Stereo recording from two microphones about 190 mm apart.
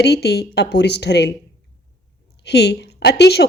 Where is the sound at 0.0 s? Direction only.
60° left (ahead or behind).